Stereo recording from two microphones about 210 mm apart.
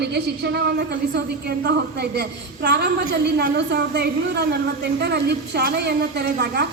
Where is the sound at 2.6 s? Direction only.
50° right (ahead or behind).